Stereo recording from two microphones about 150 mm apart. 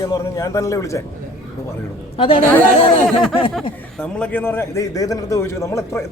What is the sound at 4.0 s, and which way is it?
A man's voice, 10° left (ahead or behind).